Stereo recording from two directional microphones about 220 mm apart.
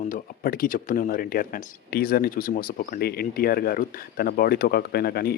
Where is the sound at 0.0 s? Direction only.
40° left (ahead or behind).